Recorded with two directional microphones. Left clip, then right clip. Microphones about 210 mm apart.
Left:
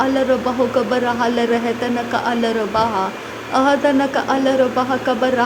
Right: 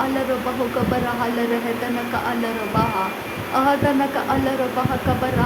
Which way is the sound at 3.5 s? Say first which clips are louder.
Left 3 dB; 20° left (ahead or behind).